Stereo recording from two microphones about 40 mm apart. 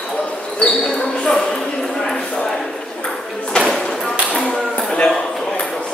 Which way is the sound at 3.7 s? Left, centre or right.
Centre.